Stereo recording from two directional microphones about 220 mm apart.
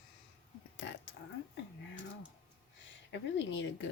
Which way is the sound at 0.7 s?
55° left (ahead or behind).